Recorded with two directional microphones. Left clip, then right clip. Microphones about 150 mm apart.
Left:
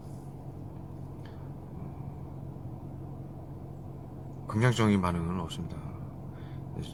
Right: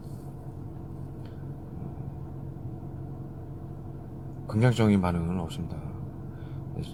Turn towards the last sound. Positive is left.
turn(degrees=10)  # may be behind; listen again after turning